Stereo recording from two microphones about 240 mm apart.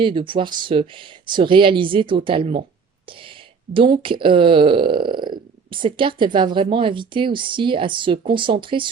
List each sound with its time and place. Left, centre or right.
0.0 s speech: right
3.8 s speech: right